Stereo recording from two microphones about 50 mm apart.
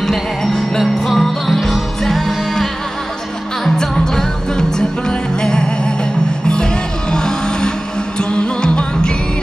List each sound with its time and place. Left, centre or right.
0.0 s music: centre